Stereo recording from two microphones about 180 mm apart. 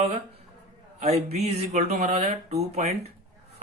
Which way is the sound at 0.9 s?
35° right (ahead or behind).